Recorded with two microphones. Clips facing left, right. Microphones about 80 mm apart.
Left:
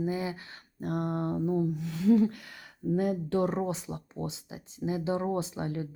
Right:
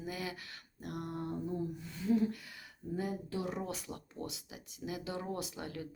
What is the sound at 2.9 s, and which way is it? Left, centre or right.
Speech, left.